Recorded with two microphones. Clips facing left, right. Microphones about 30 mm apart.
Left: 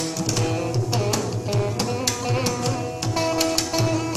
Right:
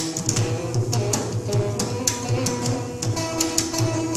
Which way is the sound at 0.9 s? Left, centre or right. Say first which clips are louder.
Left 2 dB; left.